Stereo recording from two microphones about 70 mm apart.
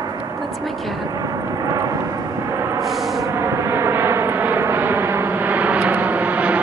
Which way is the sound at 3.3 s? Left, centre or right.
Right.